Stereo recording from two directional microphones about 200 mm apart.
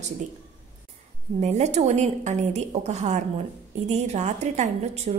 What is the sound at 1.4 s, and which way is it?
A woman's voice, 35° right (ahead or behind).